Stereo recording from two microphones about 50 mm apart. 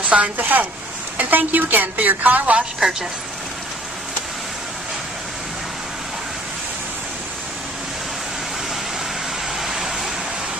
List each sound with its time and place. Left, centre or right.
0.0 s speech: right
2.8 s a woman's voice: centre
9.6 s vehicle: centre